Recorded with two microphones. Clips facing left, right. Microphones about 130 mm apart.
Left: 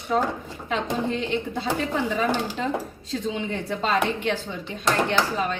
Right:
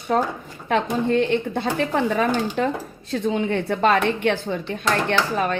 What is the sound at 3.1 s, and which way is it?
Speech, 55° right (ahead or behind).